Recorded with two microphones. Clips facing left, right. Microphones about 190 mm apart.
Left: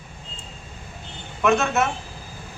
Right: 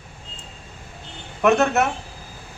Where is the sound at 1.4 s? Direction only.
65° right (ahead or behind).